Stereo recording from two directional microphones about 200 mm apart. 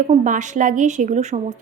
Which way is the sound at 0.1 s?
40° right (ahead or behind).